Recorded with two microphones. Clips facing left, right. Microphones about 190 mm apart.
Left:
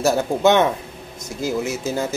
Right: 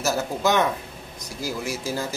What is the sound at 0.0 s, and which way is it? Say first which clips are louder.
A man's voice: left 7 dB; 25° left (ahead or behind).